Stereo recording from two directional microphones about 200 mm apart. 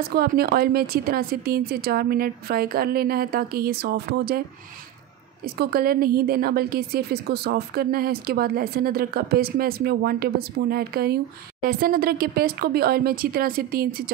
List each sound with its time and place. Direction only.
0.1 s a woman's voice: 50° right (ahead or behind)
5.4 s a woman's voice: 50° right (ahead or behind)